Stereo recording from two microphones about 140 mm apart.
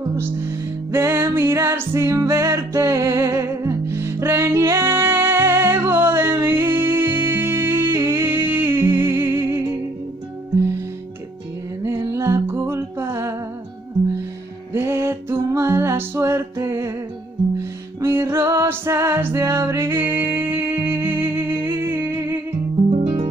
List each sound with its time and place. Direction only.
0.1 s music: 20° right (ahead or behind)
11.8 s music: 20° right (ahead or behind)
14.7 s music: 20° right (ahead or behind)